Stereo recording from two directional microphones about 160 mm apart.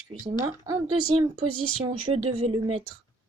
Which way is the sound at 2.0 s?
35° right (ahead or behind).